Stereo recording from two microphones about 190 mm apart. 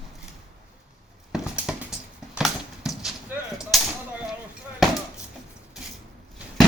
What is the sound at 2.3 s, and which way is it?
Gunshot, centre (ahead or behind).